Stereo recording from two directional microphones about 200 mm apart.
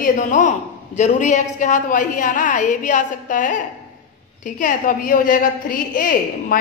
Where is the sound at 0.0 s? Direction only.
40° left (ahead or behind).